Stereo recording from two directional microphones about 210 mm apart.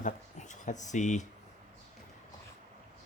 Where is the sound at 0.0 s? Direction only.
35° left (ahead or behind).